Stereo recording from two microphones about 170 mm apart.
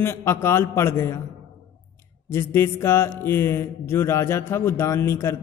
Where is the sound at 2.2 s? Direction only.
15° left (ahead or behind).